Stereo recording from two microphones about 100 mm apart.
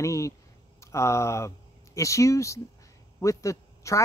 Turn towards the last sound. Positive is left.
turn(degrees=30)  # may be behind; listen again after turning